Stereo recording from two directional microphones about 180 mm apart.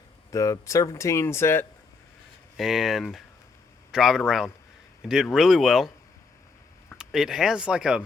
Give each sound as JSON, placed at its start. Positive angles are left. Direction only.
{"t": 0.3, "sound": "speech", "side_deg": 20}
{"t": 2.6, "sound": "speech", "side_deg": 0}
{"t": 6.9, "sound": "speech", "side_deg": -5}